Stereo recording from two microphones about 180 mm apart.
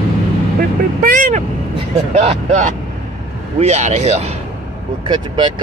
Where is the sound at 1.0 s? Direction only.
50° right (ahead or behind).